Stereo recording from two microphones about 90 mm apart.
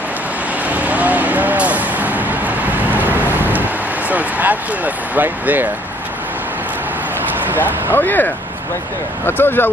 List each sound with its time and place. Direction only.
0.7 s vehicle: 15° right (ahead or behind)
4.1 s speech: 20° right (ahead or behind)
7.5 s speech: 20° left (ahead or behind)